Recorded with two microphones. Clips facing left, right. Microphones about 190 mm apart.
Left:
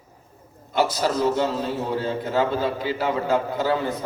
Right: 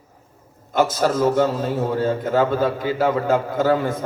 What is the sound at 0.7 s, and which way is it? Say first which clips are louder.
A man's voice: right 3 dB; 45° right (ahead or behind).